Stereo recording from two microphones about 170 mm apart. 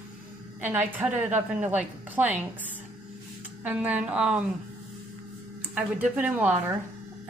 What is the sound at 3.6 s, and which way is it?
Speech, 10° right (ahead or behind).